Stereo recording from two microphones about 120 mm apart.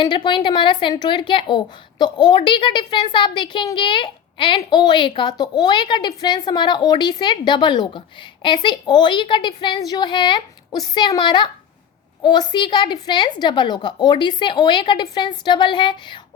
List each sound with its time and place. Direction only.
0.0 s a woman's voice: 40° left (ahead or behind)